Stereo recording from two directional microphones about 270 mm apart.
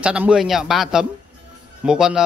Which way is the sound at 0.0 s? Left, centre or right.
Centre.